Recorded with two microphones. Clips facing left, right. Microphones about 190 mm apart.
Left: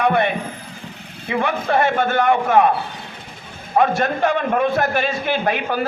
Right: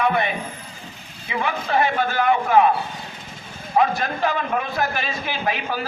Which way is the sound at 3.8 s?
50° left (ahead or behind).